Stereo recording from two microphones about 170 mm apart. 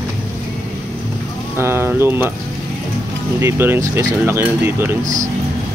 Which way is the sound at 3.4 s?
15° right (ahead or behind).